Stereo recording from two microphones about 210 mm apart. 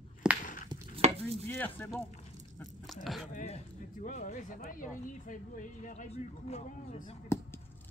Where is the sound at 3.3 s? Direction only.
35° left (ahead or behind).